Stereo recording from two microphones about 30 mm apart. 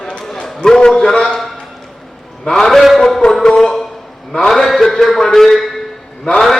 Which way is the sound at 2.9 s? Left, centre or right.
Centre.